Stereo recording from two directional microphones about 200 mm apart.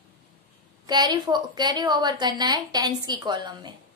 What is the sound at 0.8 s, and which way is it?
A woman's voice, 20° right (ahead or behind).